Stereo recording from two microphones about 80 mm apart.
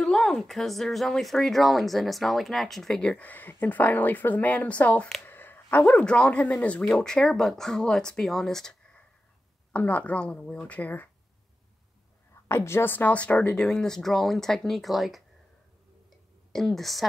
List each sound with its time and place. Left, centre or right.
0.0 s speech: centre
3.3 s a woman's voice: left; by 9.0 s centre
9.7 s a woman's voice: centre
12.4 s speech: left; by 15.2 s centre
16.1 s a sound: centre